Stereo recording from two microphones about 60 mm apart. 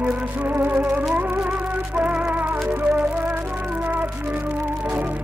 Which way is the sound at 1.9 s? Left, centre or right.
Right.